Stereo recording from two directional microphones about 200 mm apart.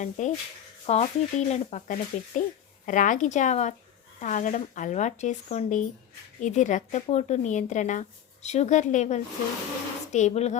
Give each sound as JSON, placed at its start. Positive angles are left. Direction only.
{"t": 0.0, "sound": "speech", "side_deg": 35}